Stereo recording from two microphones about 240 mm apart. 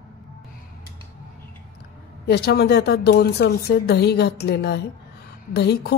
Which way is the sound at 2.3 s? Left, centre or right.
Left.